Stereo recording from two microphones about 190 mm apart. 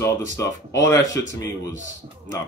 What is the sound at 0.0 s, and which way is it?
Speech, 15° left (ahead or behind).